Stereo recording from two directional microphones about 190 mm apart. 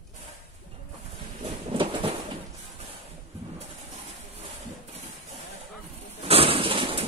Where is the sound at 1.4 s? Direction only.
25° right (ahead or behind).